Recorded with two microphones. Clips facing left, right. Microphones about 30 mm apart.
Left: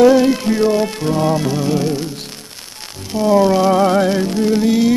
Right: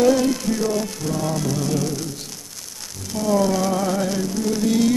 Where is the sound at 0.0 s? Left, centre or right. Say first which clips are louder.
Left 7 dB; left.